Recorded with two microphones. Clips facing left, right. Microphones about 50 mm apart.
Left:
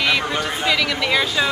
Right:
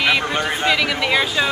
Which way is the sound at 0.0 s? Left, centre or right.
Centre.